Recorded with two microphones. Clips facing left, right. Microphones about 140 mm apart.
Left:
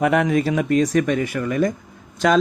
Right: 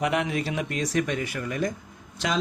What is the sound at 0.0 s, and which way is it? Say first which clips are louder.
Speech: left 8 dB; 50° left (ahead or behind).